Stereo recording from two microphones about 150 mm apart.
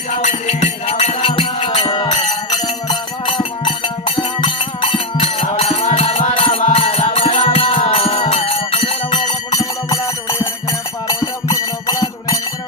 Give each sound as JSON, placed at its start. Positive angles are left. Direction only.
{"t": 0.1, "sound": "music", "side_deg": 50}